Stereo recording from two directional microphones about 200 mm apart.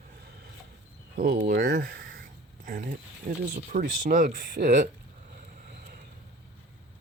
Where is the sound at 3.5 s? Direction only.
40° right (ahead or behind).